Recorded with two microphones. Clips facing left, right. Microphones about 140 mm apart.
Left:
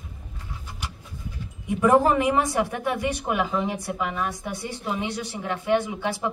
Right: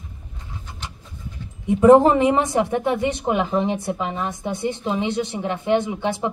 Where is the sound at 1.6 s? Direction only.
25° right (ahead or behind).